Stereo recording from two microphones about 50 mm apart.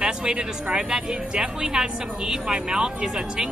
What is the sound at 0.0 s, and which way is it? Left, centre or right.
Speech, centre.